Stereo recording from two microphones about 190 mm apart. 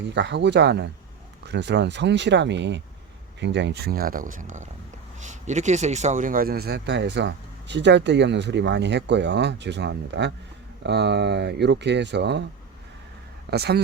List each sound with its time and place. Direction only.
0.1 s speech: 65° right (ahead or behind)
13.5 s speech: 60° right (ahead or behind)